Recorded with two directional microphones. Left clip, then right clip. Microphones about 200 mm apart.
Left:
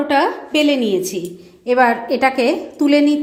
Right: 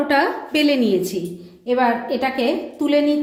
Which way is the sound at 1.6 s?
35° left (ahead or behind).